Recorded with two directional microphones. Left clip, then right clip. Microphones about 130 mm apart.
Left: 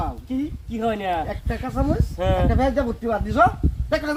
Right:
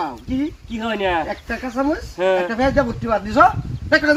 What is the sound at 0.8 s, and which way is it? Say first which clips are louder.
A man's voice: right 3 dB; 15° left (ahead or behind).